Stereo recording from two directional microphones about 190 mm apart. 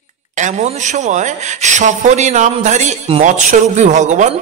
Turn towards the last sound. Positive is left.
turn(degrees=-40)  # may be behind; listen again after turning